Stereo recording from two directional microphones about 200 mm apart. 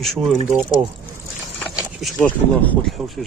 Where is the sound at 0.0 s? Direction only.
Centre (ahead or behind).